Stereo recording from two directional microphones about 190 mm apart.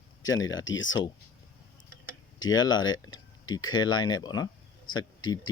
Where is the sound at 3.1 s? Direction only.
20° left (ahead or behind).